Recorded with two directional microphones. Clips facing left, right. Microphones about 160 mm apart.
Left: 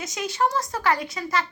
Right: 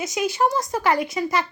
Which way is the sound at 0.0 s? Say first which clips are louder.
Right 3 dB; 10° right (ahead or behind).